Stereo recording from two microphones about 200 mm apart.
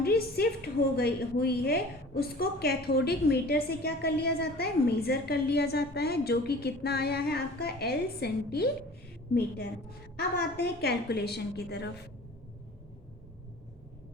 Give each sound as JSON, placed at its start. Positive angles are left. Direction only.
{"t": 0.0, "sound": "a woman's voice", "side_deg": 50}
{"t": 10.2, "sound": "a woman's voice", "side_deg": 50}